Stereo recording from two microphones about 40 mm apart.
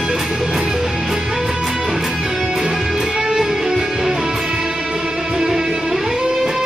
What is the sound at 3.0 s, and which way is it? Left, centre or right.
Music, right.